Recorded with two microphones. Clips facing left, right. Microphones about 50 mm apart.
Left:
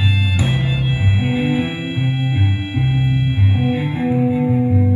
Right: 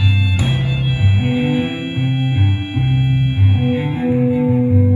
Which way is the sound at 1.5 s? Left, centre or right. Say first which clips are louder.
Right 1 dB; right.